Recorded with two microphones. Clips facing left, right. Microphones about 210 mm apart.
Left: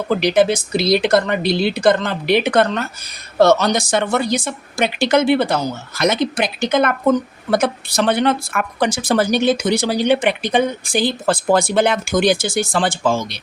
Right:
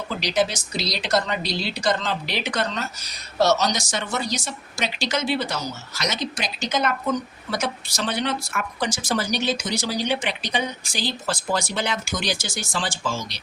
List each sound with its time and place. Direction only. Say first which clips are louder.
0.1 s a woman's voice: left 9 dB; 55° left (ahead or behind)